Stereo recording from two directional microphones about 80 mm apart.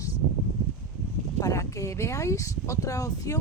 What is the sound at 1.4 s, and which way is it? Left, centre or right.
Speech, left.